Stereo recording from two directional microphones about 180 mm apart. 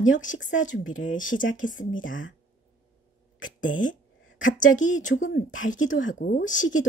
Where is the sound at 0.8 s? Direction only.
90° left.